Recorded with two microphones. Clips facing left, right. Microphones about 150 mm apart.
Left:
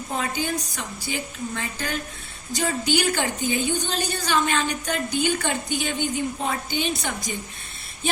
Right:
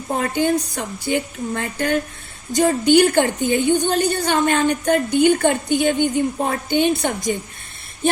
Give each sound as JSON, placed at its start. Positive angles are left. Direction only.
{"t": 0.1, "sound": "a woman's voice", "side_deg": -55}